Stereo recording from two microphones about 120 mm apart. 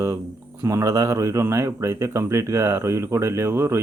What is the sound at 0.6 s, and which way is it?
A man's voice, 25° right (ahead or behind).